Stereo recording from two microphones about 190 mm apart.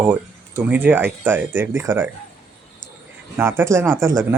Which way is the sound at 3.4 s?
15° right (ahead or behind).